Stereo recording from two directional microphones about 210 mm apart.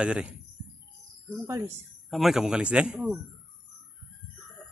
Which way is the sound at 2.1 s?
Centre (ahead or behind).